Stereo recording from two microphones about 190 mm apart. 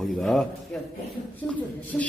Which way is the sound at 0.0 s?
Centre (ahead or behind).